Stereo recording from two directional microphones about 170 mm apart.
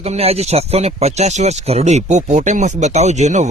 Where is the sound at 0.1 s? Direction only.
40° right (ahead or behind).